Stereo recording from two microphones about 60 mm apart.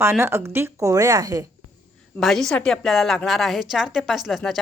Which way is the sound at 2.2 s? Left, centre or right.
Centre.